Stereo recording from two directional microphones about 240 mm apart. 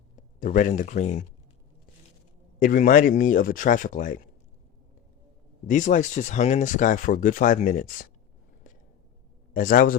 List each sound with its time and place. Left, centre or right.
0.2 s speech: left
2.6 s speech: left
5.6 s speech: left
9.5 s speech: left